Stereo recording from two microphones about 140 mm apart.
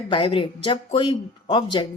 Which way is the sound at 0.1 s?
40° left (ahead or behind).